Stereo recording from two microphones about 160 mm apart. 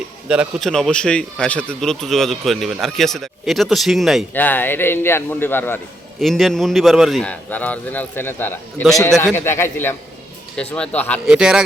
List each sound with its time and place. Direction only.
0.3 s a man's voice: 5° right (ahead or behind)
0.7 s a man's voice: 5° left (ahead or behind)
4.4 s a man's voice: 10° left (ahead or behind)
6.1 s a man's voice: centre (ahead or behind)
11.3 s a man's voice: 5° right (ahead or behind)